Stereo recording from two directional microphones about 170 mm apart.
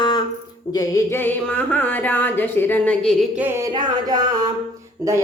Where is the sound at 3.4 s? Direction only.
15° right (ahead or behind).